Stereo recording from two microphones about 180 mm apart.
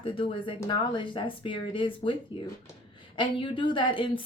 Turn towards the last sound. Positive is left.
turn(degrees=25)  # may be behind; listen again after turning